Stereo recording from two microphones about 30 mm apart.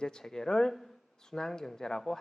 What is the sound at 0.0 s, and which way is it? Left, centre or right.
Speech, left.